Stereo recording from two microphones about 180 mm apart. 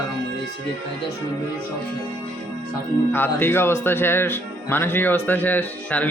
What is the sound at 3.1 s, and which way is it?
Speech, 10° left (ahead or behind).